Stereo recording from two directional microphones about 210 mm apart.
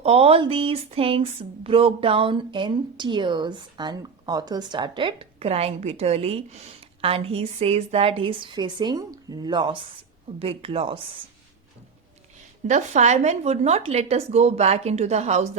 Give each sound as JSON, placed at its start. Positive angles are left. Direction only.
{"t": 0.0, "sound": "speech", "side_deg": -25}
{"t": 12.6, "sound": "a woman's voice", "side_deg": -35}